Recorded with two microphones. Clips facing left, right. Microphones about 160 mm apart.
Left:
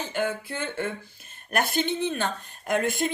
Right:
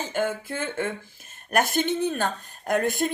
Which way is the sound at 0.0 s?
45° right (ahead or behind).